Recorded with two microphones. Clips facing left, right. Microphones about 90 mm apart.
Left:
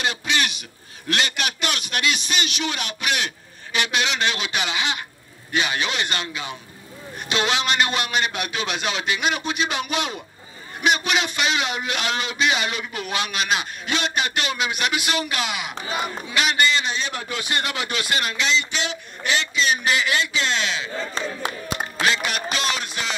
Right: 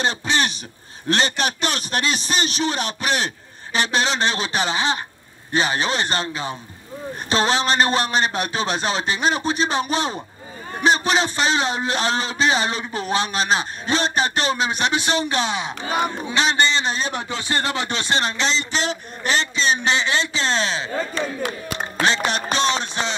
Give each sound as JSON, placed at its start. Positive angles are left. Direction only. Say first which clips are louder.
{"t": 0.0, "sound": "a man's voice", "louder": "right 3 dB", "side_deg": -35}
{"t": 21.1, "sound": "speech", "louder": "right 3 dB", "side_deg": 25}
{"t": 22.0, "sound": "a man's voice", "louder": "right 3 dB", "side_deg": -30}